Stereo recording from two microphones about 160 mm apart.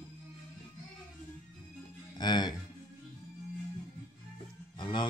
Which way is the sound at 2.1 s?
25° left (ahead or behind).